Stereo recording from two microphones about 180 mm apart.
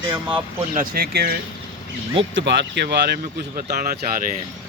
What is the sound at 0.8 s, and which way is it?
Speech, 60° right (ahead or behind).